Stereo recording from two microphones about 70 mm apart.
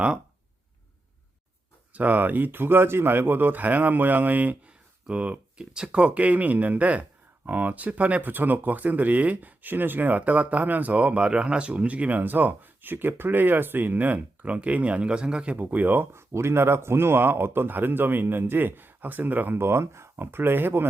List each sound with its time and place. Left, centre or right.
1.9 s speech: right
16.3 s a man's voice: right